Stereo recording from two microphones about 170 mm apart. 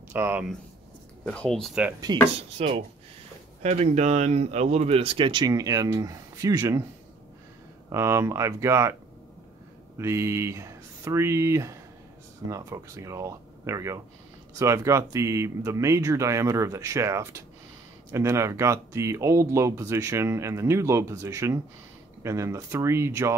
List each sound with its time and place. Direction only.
0.1 s speech: 10° right (ahead or behind)
1.2 s speech: 5° left (ahead or behind)
2.1 s speech: 25° right (ahead or behind)
2.6 s speech: 35° right (ahead or behind)
7.9 s speech: 15° right (ahead or behind)
9.9 s speech: 15° right (ahead or behind)